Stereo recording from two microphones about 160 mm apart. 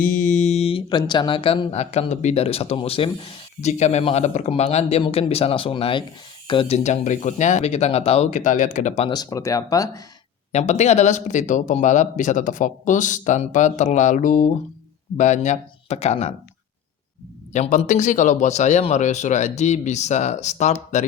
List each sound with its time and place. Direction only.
0.0 s speech: 55° left (ahead or behind)
9.0 s speech: 25° left (ahead or behind)
10.5 s speech: 45° left (ahead or behind)
17.5 s speech: 50° left (ahead or behind)